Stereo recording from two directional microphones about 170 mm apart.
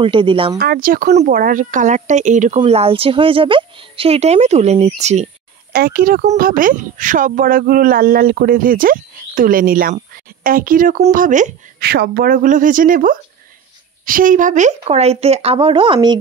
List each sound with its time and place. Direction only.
0.0 s speech: 30° right (ahead or behind)
0.6 s speech: 60° right (ahead or behind)
2.6 s speech: 35° right (ahead or behind)
5.7 s speech: 65° right (ahead or behind); by 11.5 s 50° right (ahead or behind)
11.8 s speech: 70° right (ahead or behind); by 16.2 s 25° right (ahead or behind)